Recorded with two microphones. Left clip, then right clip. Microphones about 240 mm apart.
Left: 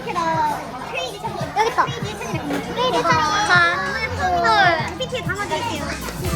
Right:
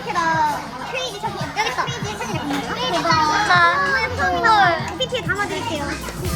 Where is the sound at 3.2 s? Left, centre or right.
Centre.